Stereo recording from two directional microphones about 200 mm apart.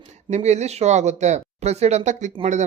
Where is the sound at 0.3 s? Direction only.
35° right (ahead or behind).